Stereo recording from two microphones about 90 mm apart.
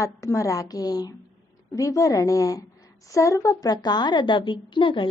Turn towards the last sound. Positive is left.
turn(degrees=70)  # may be behind; listen again after turning